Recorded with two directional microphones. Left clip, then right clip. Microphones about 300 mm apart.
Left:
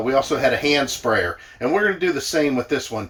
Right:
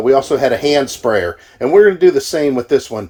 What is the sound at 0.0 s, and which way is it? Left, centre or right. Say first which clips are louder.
Speech: right 6 dB; centre.